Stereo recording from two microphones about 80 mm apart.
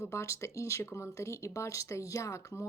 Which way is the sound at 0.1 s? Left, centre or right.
Left.